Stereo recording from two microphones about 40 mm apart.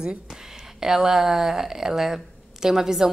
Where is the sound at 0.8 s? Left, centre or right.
Centre.